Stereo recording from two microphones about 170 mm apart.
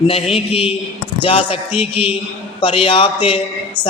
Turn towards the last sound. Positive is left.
turn(degrees=30)  # may be behind; listen again after turning